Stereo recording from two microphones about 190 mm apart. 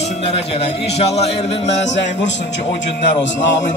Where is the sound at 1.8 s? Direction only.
65° left (ahead or behind).